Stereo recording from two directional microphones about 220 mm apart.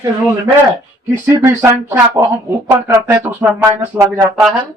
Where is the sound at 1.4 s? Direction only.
10° right (ahead or behind).